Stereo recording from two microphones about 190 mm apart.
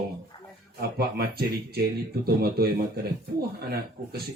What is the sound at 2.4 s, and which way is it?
Speech, 55° right (ahead or behind).